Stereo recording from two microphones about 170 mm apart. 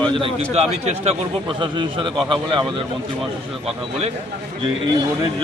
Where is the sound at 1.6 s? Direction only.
30° right (ahead or behind).